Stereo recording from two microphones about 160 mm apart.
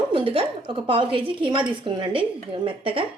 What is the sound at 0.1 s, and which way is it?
A woman's voice, 35° right (ahead or behind).